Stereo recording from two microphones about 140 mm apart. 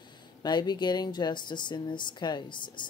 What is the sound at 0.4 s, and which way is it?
Speech, 30° left (ahead or behind).